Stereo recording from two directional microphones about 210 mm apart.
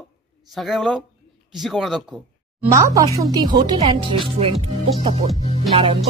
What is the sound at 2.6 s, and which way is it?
Speech, 15° right (ahead or behind).